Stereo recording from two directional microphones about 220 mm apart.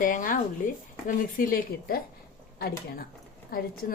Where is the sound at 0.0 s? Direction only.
35° left (ahead or behind).